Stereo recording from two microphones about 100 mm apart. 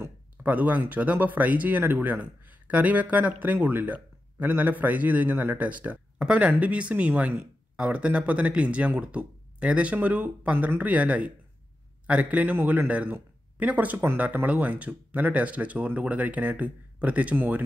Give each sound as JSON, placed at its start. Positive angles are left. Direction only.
{"t": 0.0, "sound": "speech", "side_deg": -15}